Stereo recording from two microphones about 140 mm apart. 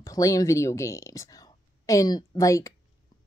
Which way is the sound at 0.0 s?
25° left (ahead or behind).